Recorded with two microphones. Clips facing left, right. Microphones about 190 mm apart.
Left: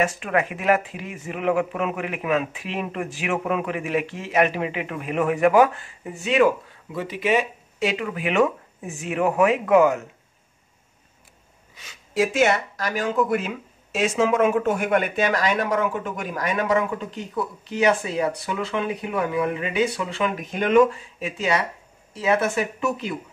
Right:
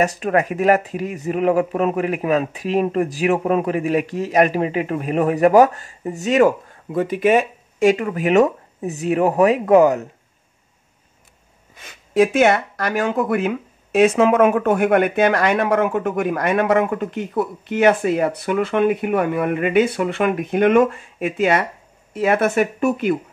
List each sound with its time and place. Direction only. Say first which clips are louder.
0.0 s speech: right 4 dB; 40° right (ahead or behind)
11.7 s speech: right 7 dB; 55° right (ahead or behind)